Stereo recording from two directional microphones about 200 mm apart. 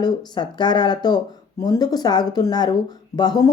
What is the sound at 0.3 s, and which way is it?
A woman's voice, 20° left (ahead or behind).